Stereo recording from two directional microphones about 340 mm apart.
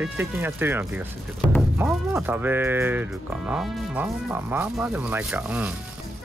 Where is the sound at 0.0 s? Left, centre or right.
Centre.